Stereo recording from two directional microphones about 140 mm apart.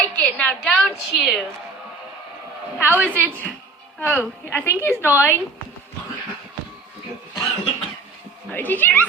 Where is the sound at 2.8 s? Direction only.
15° left (ahead or behind).